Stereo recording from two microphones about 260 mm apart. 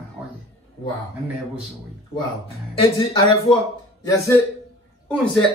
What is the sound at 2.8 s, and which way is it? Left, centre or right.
A woman's voice, centre.